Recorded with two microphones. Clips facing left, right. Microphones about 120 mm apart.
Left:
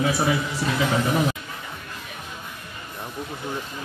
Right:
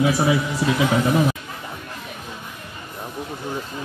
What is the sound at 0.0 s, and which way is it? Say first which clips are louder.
A man's voice: right 3 dB; 10° right (ahead or behind).